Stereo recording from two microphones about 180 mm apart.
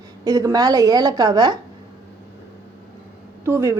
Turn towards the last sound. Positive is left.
turn(degrees=-15)  # may be behind; listen again after turning